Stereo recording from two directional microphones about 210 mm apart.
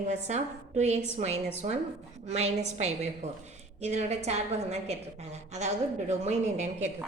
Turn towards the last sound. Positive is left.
turn(degrees=-35)  # may be behind; listen again after turning